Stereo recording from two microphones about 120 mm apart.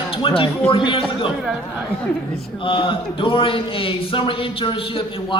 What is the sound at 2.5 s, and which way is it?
A man's voice, 45° left (ahead or behind).